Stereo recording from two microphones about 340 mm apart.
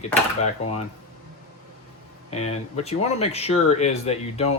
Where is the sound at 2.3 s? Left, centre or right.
Centre.